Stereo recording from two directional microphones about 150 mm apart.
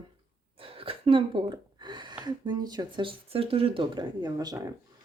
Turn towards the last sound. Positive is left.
turn(degrees=-25)  # may be behind; listen again after turning